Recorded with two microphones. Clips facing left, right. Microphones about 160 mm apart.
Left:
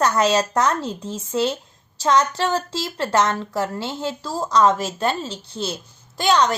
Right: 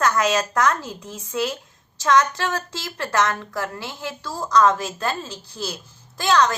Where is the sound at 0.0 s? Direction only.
30° left (ahead or behind).